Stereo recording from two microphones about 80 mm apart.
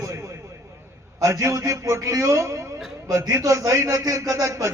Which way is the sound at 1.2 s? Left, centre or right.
Right.